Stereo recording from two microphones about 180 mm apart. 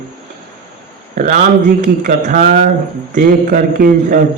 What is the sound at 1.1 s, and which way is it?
A man's voice, 45° right (ahead or behind).